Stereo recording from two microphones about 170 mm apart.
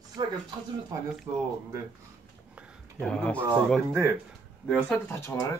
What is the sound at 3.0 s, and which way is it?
Speech, 5° left (ahead or behind).